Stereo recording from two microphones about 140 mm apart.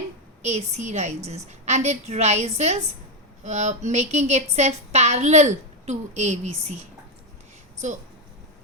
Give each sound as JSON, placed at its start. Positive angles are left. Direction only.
{"t": 0.4, "sound": "a woman's voice", "side_deg": -55}